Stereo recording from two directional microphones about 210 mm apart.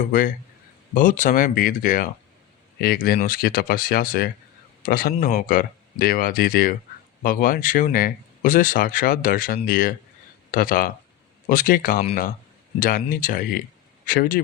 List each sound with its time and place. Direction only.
0.1 s speech: 40° left (ahead or behind)